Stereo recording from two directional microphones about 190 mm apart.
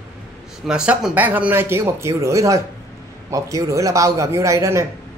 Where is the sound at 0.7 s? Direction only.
5° right (ahead or behind).